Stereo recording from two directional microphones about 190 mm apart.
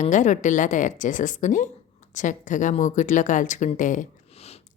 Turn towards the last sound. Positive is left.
turn(degrees=35)  # may be behind; listen again after turning